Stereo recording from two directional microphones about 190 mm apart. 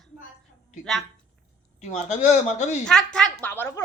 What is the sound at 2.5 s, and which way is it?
Speech, 40° left (ahead or behind).